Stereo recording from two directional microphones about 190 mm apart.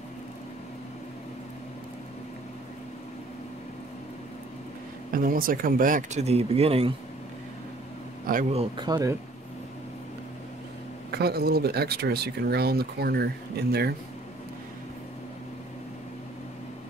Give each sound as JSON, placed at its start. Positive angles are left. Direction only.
{"t": 5.1, "sound": "speech", "side_deg": -50}
{"t": 8.3, "sound": "speech", "side_deg": -45}
{"t": 8.5, "sound": "speech", "side_deg": -25}
{"t": 11.1, "sound": "speech", "side_deg": -55}